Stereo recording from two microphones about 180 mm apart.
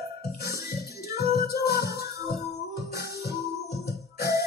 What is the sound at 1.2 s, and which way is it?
Music, 60° left (ahead or behind).